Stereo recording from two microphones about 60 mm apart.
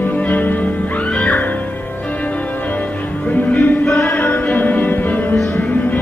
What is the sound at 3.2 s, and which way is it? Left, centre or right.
Music, left.